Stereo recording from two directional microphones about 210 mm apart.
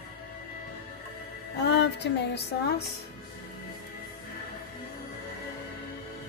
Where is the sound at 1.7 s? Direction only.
55° left (ahead or behind).